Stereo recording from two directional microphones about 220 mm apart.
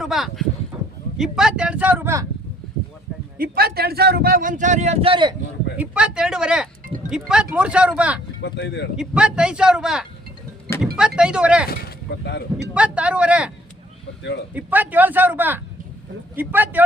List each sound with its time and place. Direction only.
0.0 s speech: centre (ahead or behind)
3.3 s a man's voice: 40° right (ahead or behind); by 5.3 s 25° right (ahead or behind)
5.7 s speech: 5° right (ahead or behind)
8.4 s speech: 55° left (ahead or behind)
9.0 s speech: 5° right (ahead or behind)
11.8 s speech: 45° left (ahead or behind)
12.7 s speech: 5° right (ahead or behind)
14.5 s speech: 5° right (ahead or behind)